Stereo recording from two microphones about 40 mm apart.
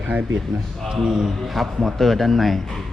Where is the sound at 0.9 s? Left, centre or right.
Centre.